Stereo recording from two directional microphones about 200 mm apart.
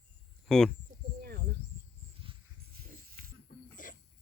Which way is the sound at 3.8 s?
40° left (ahead or behind).